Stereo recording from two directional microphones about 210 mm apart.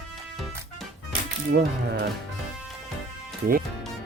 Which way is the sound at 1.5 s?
50° right (ahead or behind).